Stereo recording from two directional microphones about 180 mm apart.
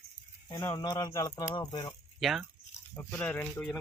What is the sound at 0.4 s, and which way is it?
Speech, 20° left (ahead or behind).